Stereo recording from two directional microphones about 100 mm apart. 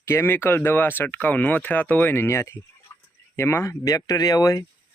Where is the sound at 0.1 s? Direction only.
25° left (ahead or behind).